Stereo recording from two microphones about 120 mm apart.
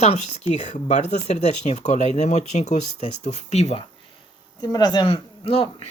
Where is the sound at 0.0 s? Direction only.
60° left (ahead or behind).